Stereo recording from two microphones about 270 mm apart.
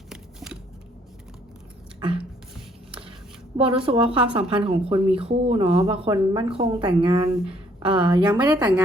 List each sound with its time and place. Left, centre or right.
0.1 s shuffling cards: centre
2.0 s beatboxing: centre
3.6 s a woman's voice: centre
8.5 s a woman's voice: centre